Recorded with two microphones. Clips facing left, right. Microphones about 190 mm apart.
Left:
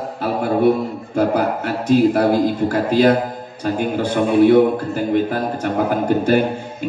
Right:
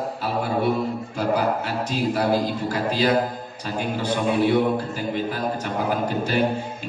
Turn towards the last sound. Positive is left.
turn(degrees=55)  # may be behind; listen again after turning